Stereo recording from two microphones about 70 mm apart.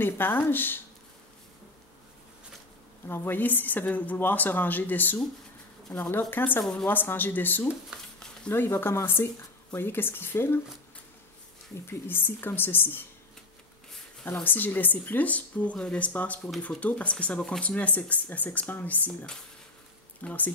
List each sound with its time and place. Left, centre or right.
0.0 s speech: left
3.1 s speech: left
6.6 s a woman's voice: centre
6.9 s speech: left
11.9 s speech: left
14.4 s speech: left
20.2 s speech: left